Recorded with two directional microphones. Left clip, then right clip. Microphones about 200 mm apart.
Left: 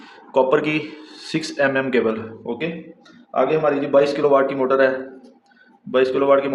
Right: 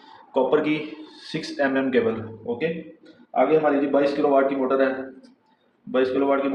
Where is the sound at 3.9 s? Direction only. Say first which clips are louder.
Left 8 dB; 45° left (ahead or behind).